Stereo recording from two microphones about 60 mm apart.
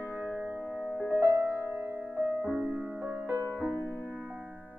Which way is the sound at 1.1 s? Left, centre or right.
Right.